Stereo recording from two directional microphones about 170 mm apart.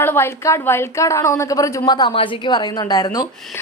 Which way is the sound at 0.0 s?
15° left (ahead or behind).